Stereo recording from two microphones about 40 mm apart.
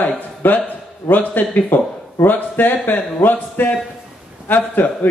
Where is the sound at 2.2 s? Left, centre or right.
Left.